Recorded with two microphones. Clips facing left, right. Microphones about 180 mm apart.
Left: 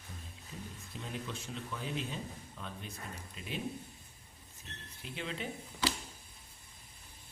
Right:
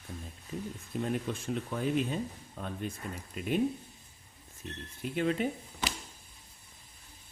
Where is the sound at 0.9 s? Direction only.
50° right (ahead or behind).